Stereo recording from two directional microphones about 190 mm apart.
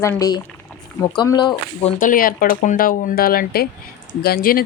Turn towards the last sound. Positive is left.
turn(degrees=50)  # may be behind; listen again after turning